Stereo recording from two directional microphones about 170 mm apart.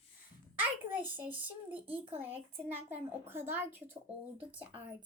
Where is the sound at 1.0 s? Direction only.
10° right (ahead or behind).